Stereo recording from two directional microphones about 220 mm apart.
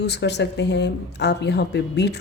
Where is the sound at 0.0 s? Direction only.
50° left (ahead or behind).